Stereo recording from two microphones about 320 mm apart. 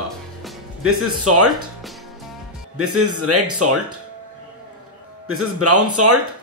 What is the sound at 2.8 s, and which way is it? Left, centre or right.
Speech, right.